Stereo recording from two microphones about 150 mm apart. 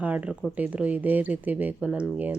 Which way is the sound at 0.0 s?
10° right (ahead or behind).